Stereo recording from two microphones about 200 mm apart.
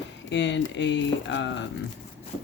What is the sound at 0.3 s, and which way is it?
Speech, 65° left (ahead or behind).